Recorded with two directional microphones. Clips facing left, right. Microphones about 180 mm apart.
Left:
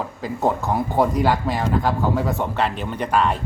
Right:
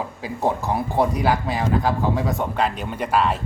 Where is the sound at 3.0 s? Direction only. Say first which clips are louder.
Left 1 dB; 5° right (ahead or behind).